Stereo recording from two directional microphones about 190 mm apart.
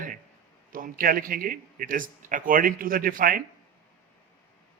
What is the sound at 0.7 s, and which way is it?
Speech, 45° right (ahead or behind).